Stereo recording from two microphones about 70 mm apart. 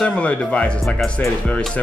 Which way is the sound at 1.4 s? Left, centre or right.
Centre.